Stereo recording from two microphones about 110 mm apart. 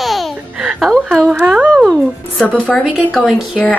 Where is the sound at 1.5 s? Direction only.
5° right (ahead or behind).